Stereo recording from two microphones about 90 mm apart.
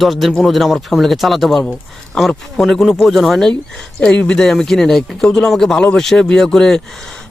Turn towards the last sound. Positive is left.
turn(degrees=5)  # may be behind; listen again after turning